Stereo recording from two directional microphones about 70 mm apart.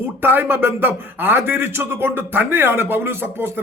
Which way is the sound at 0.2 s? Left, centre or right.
Right.